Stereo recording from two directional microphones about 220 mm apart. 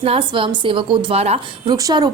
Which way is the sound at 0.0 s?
25° right (ahead or behind).